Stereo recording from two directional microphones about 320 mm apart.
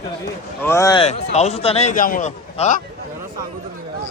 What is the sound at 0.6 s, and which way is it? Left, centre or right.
A man's voice, centre.